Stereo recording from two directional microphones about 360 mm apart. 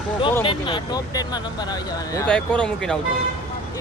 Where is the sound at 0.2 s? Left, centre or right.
Centre.